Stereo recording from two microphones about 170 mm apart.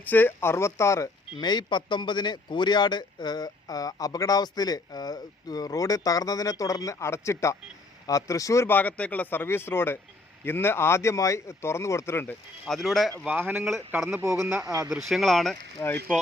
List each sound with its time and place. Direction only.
0.0 s a man's voice: 10° left (ahead or behind); by 14.6 s 5° right (ahead or behind)
14.6 s speech: 20° right (ahead or behind)
14.8 s speech: centre (ahead or behind)
15.8 s speech: 15° left (ahead or behind)